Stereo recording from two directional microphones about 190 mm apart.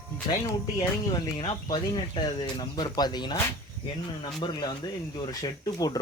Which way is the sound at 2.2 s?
25° left (ahead or behind).